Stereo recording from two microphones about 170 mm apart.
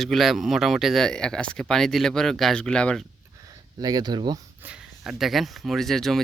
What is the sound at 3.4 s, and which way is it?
Speech, 25° right (ahead or behind).